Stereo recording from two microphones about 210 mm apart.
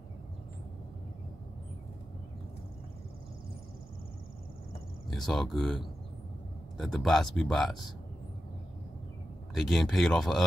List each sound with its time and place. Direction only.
5.1 s speech: centre (ahead or behind)
6.8 s speech: centre (ahead or behind)
9.5 s speech: centre (ahead or behind)